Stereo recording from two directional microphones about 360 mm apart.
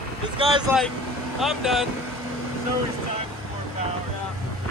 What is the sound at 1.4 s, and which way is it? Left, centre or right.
Speech, centre.